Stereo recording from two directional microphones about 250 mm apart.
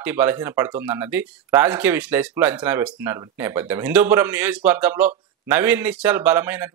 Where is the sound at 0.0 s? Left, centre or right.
Centre.